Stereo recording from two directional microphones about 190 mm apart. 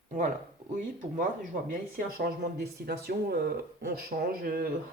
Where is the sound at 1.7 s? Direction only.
50° right (ahead or behind).